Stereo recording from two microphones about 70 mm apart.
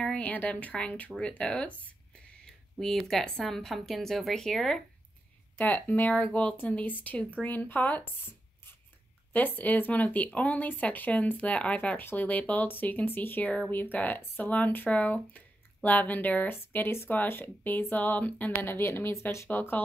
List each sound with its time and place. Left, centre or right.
0.0 s speech: centre
2.8 s a woman's voice: centre
5.6 s speech: left
9.6 s speech: left